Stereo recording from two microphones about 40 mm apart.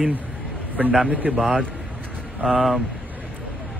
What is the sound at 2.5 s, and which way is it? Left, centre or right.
Speech, centre.